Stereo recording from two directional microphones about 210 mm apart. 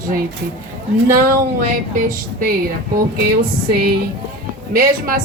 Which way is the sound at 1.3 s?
40° right (ahead or behind).